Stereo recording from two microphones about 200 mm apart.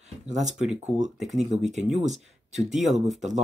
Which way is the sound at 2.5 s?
Centre (ahead or behind).